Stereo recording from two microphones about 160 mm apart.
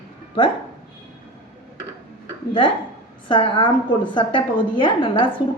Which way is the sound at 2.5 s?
30° left (ahead or behind).